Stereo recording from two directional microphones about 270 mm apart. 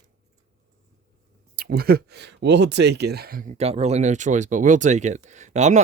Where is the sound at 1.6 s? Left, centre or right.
Right.